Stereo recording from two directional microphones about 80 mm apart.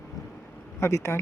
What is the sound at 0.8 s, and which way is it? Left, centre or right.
Speech, left.